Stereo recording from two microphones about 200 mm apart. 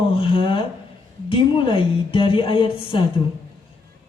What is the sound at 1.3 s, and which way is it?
Speech, 25° left (ahead or behind).